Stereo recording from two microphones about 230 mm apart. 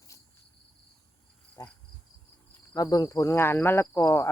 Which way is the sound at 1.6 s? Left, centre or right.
Centre.